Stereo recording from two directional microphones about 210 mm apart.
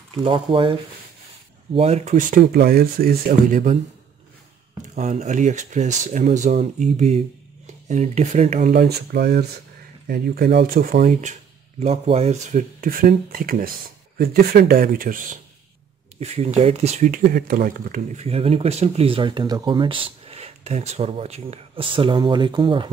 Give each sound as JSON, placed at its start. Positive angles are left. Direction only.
{"t": 0.1, "sound": "speech", "side_deg": -25}
{"t": 1.8, "sound": "speech", "side_deg": -30}
{"t": 4.9, "sound": "speech", "side_deg": -35}
{"t": 8.7, "sound": "speech", "side_deg": -50}
{"t": 16.2, "sound": "speech", "side_deg": -30}